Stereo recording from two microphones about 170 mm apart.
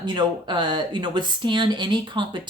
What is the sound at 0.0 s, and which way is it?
Speech, 25° right (ahead or behind).